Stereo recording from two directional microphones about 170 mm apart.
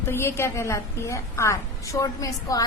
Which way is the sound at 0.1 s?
15° left (ahead or behind).